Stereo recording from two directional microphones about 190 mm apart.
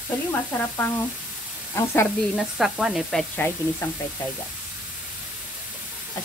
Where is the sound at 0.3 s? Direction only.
10° left (ahead or behind).